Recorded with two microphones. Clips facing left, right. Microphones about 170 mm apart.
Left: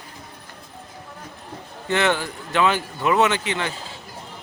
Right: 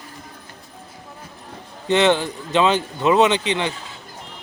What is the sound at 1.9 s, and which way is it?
Speech, 20° right (ahead or behind).